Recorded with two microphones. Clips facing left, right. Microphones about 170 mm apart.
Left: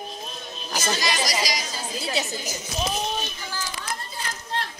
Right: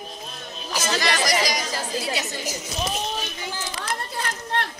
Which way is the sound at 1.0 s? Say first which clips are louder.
Right 7 dB; 65° right (ahead or behind).